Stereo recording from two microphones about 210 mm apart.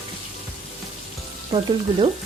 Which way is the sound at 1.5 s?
25° right (ahead or behind).